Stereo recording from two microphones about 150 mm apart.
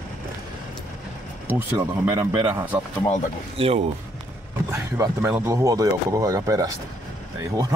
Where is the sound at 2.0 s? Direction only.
30° right (ahead or behind).